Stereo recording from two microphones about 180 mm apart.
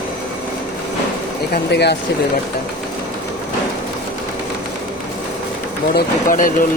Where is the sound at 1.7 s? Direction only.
70° left (ahead or behind).